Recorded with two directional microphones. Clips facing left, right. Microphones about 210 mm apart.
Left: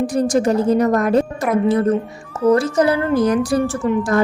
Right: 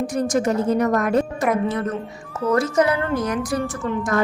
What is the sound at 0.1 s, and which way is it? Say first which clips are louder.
A woman's voice: left 4 dB; 35° left (ahead or behind).